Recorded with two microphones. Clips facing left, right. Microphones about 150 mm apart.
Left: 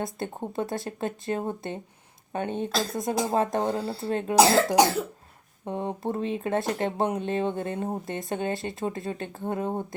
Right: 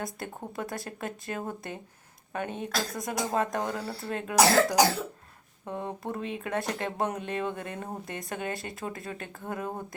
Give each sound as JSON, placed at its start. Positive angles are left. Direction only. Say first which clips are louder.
{"t": 0.0, "sound": "speech", "louder": "left 5 dB", "side_deg": 25}